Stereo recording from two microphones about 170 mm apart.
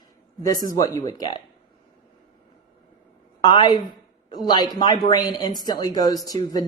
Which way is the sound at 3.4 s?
25° left (ahead or behind).